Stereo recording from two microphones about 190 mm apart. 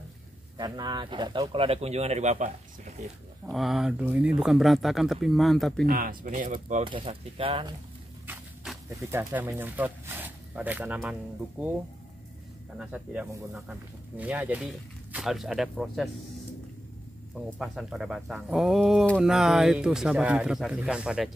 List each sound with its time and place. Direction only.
0.6 s speech: 20° right (ahead or behind); by 2.5 s 35° right (ahead or behind)
3.4 s speech: centre (ahead or behind)
5.9 s speech: 50° right (ahead or behind)
6.8 s speech: 30° right (ahead or behind)
9.0 s speech: 15° right (ahead or behind)
12.7 s speech: 5° right (ahead or behind)
17.4 s speech: centre (ahead or behind)